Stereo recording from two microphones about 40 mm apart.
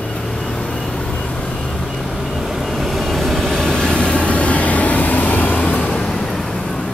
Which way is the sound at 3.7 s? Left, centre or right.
Left.